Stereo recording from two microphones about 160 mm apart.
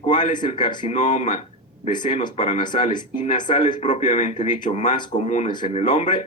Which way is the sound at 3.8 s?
45° left (ahead or behind).